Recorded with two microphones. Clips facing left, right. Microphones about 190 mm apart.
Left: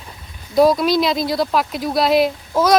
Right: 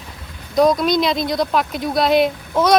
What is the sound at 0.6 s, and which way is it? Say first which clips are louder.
Speech: left 1 dB; 5° left (ahead or behind).